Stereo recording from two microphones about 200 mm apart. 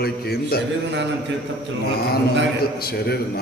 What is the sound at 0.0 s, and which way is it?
Speech, 50° left (ahead or behind).